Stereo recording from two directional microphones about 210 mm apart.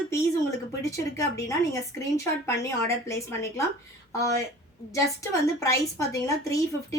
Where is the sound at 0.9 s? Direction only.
15° left (ahead or behind).